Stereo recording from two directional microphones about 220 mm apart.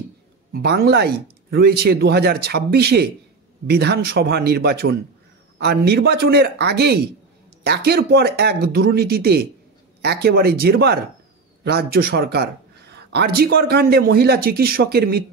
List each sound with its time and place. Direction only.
0.5 s a man's voice: 45° right (ahead or behind)